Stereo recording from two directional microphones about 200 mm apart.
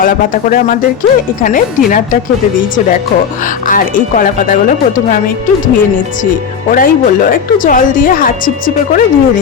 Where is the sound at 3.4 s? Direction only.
40° left (ahead or behind).